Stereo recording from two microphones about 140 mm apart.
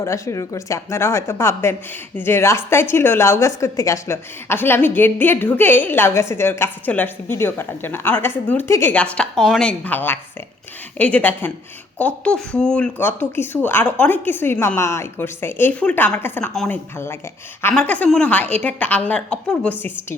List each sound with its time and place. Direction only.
0.0 s a woman's voice: 20° left (ahead or behind)